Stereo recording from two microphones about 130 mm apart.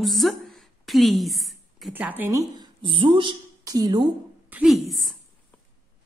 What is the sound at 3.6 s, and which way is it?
Speech, 30° right (ahead or behind).